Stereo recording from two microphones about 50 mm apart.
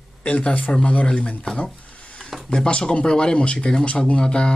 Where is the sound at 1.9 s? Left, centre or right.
Left.